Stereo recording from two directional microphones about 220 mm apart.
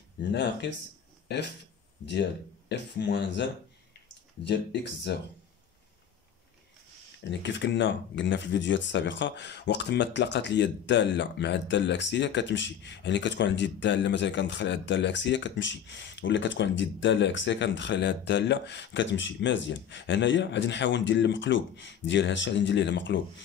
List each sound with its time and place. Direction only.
0.2 s speech: 50° left (ahead or behind)
2.7 s speech: 50° left (ahead or behind)
4.5 s speech: 50° left (ahead or behind)
7.2 s speech: 55° left (ahead or behind)